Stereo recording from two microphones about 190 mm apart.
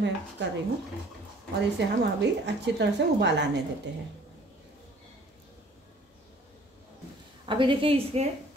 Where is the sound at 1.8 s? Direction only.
65° right (ahead or behind).